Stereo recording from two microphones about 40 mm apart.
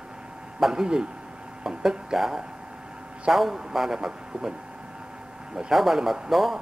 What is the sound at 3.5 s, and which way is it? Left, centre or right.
Speech, centre.